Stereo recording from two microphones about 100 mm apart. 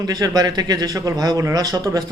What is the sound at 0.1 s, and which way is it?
Speech, 40° right (ahead or behind).